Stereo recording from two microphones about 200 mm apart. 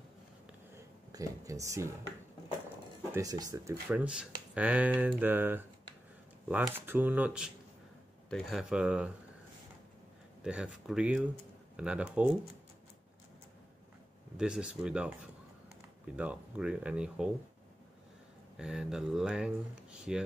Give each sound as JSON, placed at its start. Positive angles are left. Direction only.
{"t": 0.7, "sound": "a sound", "side_deg": -15}
{"t": 3.1, "sound": "speech", "side_deg": -15}
{"t": 3.9, "sound": "speech", "side_deg": -5}
{"t": 10.4, "sound": "speech", "side_deg": -5}
{"t": 14.3, "sound": "speech", "side_deg": -5}
{"t": 18.6, "sound": "speech", "side_deg": -5}